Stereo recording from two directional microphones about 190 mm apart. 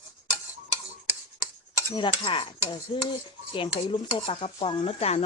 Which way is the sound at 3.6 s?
25° left (ahead or behind).